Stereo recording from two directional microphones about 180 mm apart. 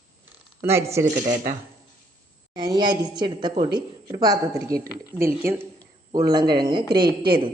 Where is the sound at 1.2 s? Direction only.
50° right (ahead or behind).